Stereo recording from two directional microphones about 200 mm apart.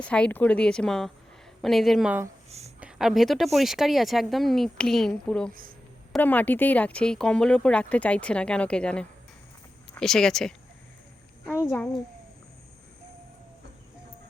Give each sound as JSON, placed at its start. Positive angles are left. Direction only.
{"t": 0.0, "sound": "speech", "side_deg": 5}
{"t": 2.5, "sound": "a sound", "side_deg": -30}
{"t": 2.8, "sound": "speech", "side_deg": 0}
{"t": 11.6, "sound": "speech", "side_deg": 5}